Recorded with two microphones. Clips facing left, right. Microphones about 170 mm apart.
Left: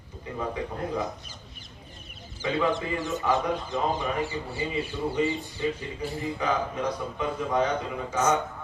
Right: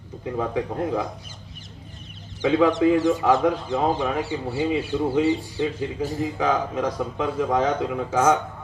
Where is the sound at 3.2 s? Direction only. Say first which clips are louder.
Right 6 dB; 75° right (ahead or behind).